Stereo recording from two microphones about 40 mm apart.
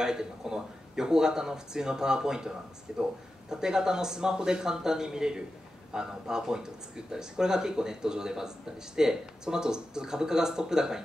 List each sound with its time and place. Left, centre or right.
0.0 s speech: centre